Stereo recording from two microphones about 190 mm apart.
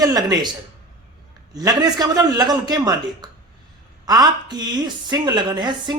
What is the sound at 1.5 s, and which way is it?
A woman's voice, 20° right (ahead or behind).